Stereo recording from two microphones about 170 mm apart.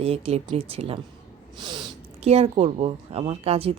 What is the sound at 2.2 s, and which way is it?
A woman's voice, 40° right (ahead or behind).